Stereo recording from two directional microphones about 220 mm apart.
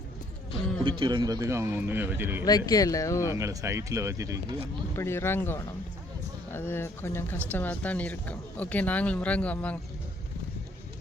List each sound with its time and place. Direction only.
0.9 s a man's voice: 20° right (ahead or behind)
2.4 s speech: 15° left (ahead or behind)
3.3 s a man's voice: 15° right (ahead or behind)
4.9 s speech: 10° left (ahead or behind)